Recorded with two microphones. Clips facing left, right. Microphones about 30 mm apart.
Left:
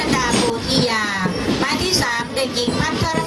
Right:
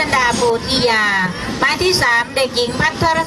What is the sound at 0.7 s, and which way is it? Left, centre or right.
Speech, right.